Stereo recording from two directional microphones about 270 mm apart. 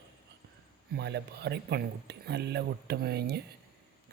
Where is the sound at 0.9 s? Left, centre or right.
Right.